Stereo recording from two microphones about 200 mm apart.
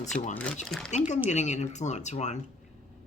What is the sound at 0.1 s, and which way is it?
Speech, 40° left (ahead or behind).